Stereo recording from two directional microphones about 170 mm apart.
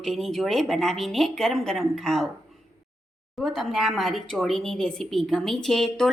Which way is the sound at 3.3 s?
Centre (ahead or behind).